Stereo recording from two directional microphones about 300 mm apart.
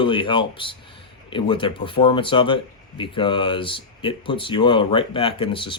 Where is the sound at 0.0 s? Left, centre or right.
Centre.